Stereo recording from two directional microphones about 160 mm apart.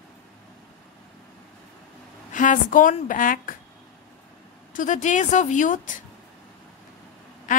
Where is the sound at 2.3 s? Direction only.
55° left (ahead or behind).